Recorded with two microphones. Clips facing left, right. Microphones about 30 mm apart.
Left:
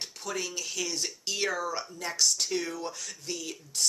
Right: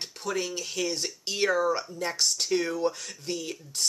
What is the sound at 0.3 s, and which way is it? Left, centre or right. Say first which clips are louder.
Speech: right 4 dB; centre.